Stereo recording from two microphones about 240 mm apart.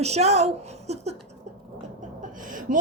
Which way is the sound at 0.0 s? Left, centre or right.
Right.